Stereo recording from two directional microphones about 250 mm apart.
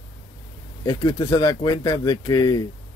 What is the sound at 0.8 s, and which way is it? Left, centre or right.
Speech, centre.